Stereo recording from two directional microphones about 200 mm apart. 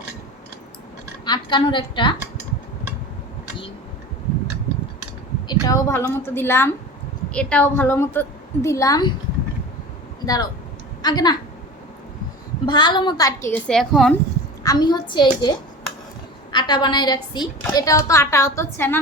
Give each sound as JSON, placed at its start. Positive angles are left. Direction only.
{"t": 1.2, "sound": "a woman's voice", "side_deg": 25}
{"t": 5.5, "sound": "a woman's voice", "side_deg": 20}
{"t": 10.2, "sound": "a woman's voice", "side_deg": 20}
{"t": 12.6, "sound": "a woman's voice", "side_deg": 20}
{"t": 13.7, "sound": "speech", "side_deg": 0}
{"t": 14.6, "sound": "a woman's voice", "side_deg": 20}